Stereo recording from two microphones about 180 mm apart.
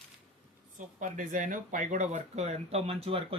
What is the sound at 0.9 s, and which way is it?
Speech, 45° right (ahead or behind).